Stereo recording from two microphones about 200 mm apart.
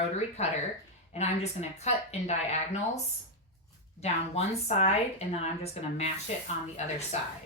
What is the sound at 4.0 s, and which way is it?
A woman's voice, 30° left (ahead or behind).